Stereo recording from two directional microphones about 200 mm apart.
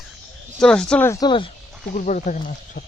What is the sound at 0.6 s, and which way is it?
Speech, 5° left (ahead or behind).